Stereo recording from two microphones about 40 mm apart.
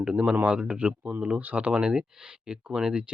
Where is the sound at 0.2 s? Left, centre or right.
Right.